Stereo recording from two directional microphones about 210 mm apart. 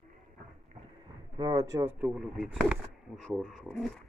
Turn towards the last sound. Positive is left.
turn(degrees=0)  # may be behind; listen again after turning